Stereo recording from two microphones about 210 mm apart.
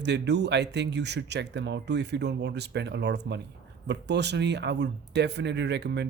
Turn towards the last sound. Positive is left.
turn(degrees=-55)  # may be behind; listen again after turning